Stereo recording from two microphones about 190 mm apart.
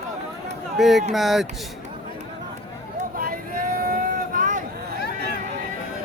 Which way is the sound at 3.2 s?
50° right (ahead or behind).